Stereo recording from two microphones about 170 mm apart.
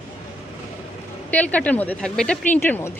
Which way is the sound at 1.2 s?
10° left (ahead or behind).